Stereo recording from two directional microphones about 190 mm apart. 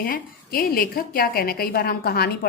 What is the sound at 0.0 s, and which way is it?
A woman's voice, 50° left (ahead or behind).